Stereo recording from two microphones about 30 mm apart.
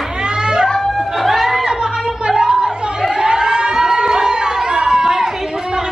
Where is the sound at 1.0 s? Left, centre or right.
Centre.